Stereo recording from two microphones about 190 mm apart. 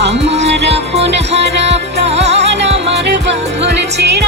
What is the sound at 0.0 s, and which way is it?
Music, 65° right (ahead or behind).